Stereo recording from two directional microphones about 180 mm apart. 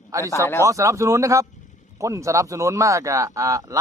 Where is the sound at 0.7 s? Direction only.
15° right (ahead or behind).